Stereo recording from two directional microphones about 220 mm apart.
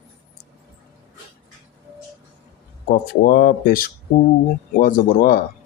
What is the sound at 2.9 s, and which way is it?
A man's voice, 40° left (ahead or behind).